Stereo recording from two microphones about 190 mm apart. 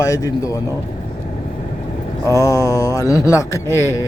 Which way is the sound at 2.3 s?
15° left (ahead or behind).